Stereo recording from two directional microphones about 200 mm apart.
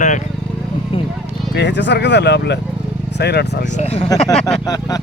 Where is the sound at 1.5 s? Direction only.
60° left (ahead or behind).